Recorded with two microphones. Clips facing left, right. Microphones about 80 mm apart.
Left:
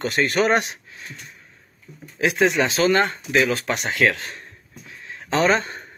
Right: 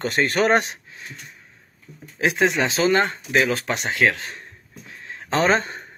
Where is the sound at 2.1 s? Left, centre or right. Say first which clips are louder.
Left 1 dB; right.